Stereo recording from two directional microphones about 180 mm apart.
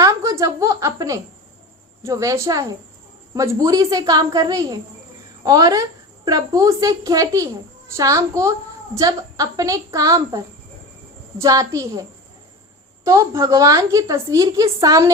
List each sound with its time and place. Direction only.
0.0 s a woman's voice: 15° right (ahead or behind)
13.1 s a woman's voice: 15° right (ahead or behind)